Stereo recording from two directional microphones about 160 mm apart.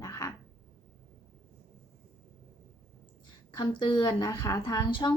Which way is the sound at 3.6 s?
25° left (ahead or behind).